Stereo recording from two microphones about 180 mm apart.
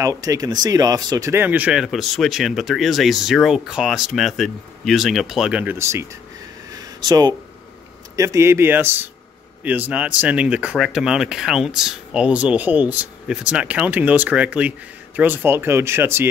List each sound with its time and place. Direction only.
0.0 s speech: 20° right (ahead or behind)
6.7 s a sound: 20° right (ahead or behind)
8.2 s speech: 15° right (ahead or behind)